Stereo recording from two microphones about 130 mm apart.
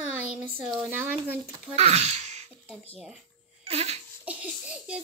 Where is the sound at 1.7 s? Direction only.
55° right (ahead or behind).